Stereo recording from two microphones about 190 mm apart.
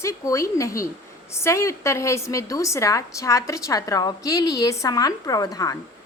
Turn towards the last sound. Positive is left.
turn(degrees=20)  # may be behind; listen again after turning